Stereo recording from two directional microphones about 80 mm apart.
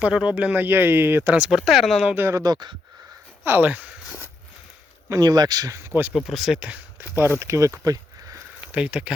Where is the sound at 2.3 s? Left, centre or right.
Right.